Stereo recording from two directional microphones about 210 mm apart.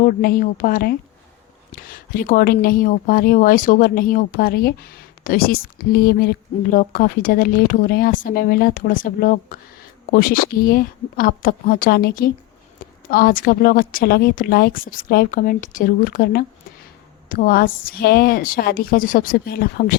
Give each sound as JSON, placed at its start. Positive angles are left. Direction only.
{"t": 0.0, "sound": "speech", "side_deg": 40}